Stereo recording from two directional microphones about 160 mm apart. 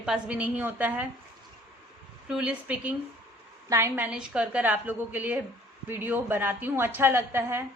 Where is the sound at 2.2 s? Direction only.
5° right (ahead or behind).